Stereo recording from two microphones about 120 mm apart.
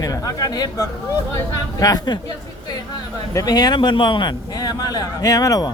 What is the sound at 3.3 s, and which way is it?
A man's voice, 30° left (ahead or behind).